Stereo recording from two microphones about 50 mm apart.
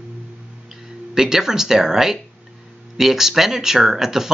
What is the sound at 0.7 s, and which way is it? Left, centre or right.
Speech, centre.